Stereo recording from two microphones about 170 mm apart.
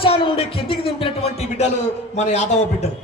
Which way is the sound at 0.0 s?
30° left (ahead or behind).